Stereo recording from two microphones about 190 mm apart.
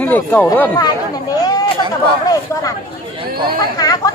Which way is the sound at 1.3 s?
20° left (ahead or behind).